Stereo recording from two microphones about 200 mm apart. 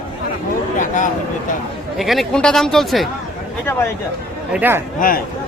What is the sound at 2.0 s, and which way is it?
Speech, centre (ahead or behind).